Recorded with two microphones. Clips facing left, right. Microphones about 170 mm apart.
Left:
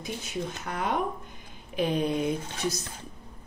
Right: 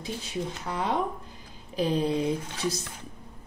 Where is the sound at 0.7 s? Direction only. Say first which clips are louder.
Right 1 dB; 30° right (ahead or behind).